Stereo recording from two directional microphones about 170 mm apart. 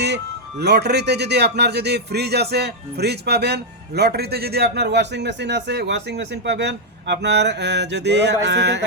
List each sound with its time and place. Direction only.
0.6 s a man's voice: 75° right (ahead or behind)